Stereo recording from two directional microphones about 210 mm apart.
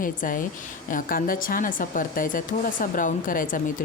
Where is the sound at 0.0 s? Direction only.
40° left (ahead or behind).